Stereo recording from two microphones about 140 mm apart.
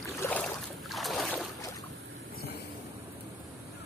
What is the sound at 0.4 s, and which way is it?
Boat, centre (ahead or behind).